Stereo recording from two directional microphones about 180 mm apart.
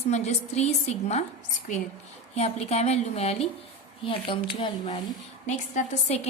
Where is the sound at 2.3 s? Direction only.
35° left (ahead or behind).